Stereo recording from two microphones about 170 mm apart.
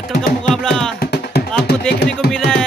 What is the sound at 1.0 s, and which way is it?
Music, 65° left (ahead or behind).